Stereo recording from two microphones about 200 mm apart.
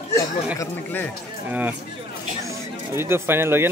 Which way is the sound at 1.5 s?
10° right (ahead or behind).